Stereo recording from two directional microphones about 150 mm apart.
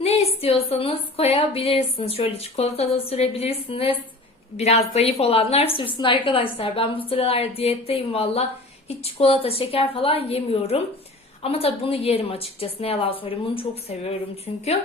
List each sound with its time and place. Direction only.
0.0 s a woman's voice: 45° left (ahead or behind)